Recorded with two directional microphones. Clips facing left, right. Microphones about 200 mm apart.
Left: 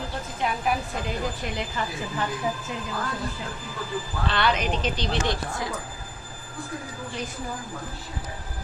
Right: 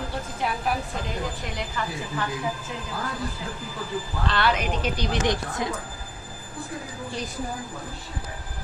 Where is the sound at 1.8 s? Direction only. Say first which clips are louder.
Right 1 dB; 20° left (ahead or behind).